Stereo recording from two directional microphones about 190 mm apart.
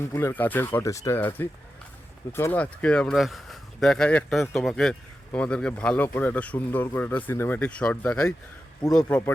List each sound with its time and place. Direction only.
0.0 s speech: 10° left (ahead or behind)